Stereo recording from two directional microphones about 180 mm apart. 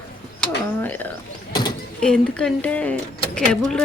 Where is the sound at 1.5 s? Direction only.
25° left (ahead or behind).